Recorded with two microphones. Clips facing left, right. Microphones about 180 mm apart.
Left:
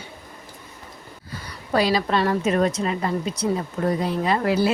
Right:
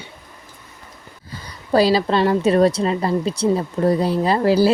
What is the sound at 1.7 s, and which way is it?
A woman's voice, 30° right (ahead or behind).